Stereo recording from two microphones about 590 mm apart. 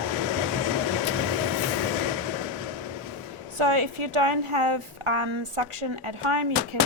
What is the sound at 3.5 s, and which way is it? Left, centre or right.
A woman's voice, right.